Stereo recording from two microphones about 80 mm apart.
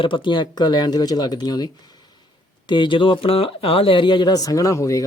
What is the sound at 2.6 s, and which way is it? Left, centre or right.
Speech, left.